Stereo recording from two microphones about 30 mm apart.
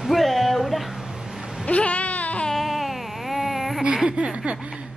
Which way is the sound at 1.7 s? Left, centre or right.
Left.